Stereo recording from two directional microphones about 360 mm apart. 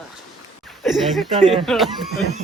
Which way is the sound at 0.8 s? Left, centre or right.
Centre.